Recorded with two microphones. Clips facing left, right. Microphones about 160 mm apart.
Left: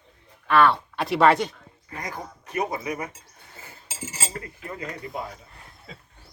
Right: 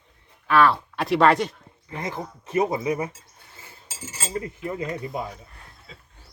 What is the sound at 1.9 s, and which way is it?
Speech, 25° right (ahead or behind).